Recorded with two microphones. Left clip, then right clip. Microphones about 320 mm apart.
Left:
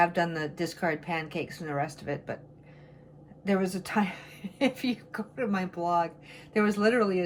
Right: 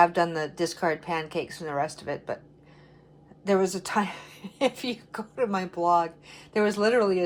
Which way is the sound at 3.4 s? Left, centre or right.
Centre.